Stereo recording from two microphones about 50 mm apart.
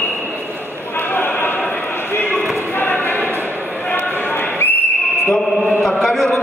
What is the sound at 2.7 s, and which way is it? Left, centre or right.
Basketball bounce, left.